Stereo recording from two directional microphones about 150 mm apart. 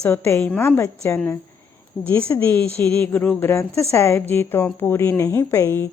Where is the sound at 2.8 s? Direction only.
10° left (ahead or behind).